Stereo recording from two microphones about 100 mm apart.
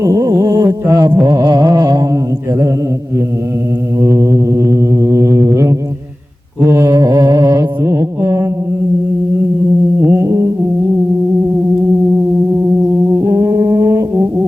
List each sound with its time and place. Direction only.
0.0 s music: 40° right (ahead or behind)
4.0 s music: 30° right (ahead or behind)
6.7 s mantra: 40° right (ahead or behind)
10.1 s music: 25° right (ahead or behind)
13.2 s brass instrument: 30° right (ahead or behind)